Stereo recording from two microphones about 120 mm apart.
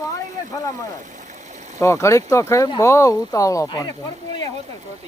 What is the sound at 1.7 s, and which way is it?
Speech, 25° left (ahead or behind).